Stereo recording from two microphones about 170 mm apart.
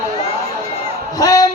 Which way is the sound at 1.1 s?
20° left (ahead or behind).